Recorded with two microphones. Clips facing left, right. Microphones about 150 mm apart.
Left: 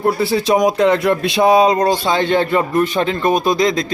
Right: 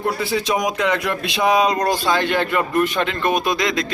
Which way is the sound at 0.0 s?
35° left (ahead or behind).